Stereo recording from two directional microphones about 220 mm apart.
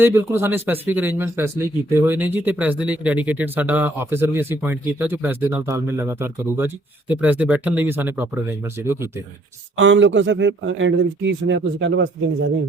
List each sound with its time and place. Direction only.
0.0 s speech: 10° right (ahead or behind)
9.7 s a man's voice: 60° right (ahead or behind)